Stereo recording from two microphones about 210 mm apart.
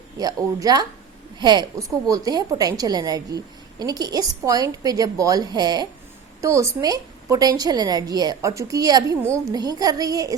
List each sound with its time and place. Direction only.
0.2 s a woman's voice: 15° right (ahead or behind)